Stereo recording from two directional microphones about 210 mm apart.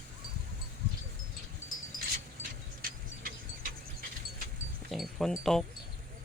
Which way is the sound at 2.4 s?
40° right (ahead or behind).